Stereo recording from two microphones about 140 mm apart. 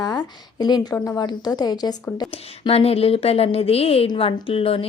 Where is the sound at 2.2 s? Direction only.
40° left (ahead or behind).